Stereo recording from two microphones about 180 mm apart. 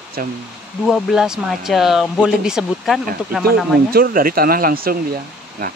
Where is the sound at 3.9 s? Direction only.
55° right (ahead or behind).